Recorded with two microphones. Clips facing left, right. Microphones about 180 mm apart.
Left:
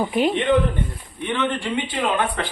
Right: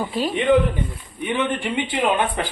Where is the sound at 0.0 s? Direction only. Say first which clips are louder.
Left 4 dB; 20° left (ahead or behind).